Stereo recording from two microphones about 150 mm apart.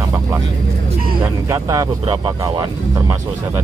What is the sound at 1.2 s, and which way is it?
Speech, 20° right (ahead or behind).